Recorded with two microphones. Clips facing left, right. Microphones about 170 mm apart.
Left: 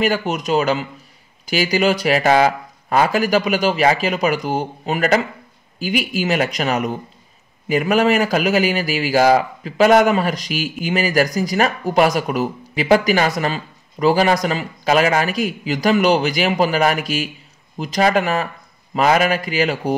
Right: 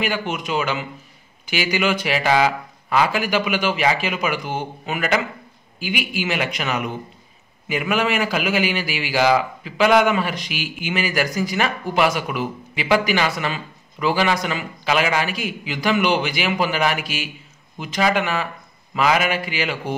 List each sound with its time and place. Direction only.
0.0 s a man's voice: 40° left (ahead or behind)